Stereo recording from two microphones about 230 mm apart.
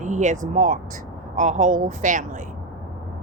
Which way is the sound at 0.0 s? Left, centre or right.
Right.